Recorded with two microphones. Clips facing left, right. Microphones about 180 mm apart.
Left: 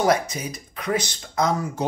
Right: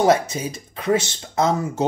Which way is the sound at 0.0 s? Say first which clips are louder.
Right 3 dB; 25° right (ahead or behind).